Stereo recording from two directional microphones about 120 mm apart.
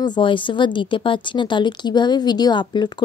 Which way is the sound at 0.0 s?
40° left (ahead or behind).